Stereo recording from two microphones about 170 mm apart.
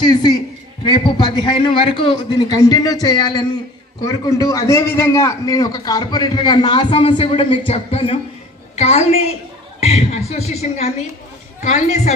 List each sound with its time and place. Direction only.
0.0 s a man's voice: 25° left (ahead or behind); by 12.1 s 45° left (ahead or behind)